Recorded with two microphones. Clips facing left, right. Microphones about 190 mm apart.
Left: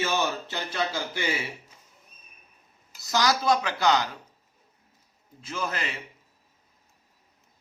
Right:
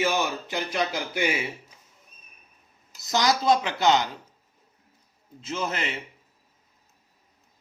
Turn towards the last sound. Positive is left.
turn(degrees=-25)  # may be behind; listen again after turning